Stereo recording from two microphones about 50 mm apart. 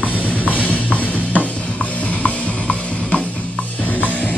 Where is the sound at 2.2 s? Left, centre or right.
Left.